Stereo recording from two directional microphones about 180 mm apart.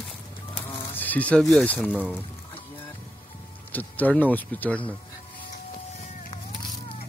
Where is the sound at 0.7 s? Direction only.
10° left (ahead or behind).